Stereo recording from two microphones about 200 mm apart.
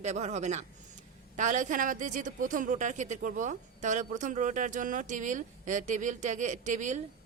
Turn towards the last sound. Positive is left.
turn(degrees=-40)  # may be behind; listen again after turning